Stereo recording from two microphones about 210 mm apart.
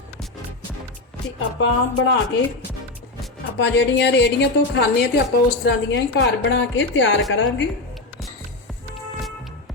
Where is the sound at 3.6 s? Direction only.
55° left (ahead or behind).